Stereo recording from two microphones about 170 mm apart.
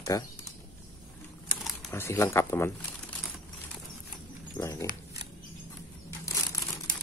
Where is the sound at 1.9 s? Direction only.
15° left (ahead or behind).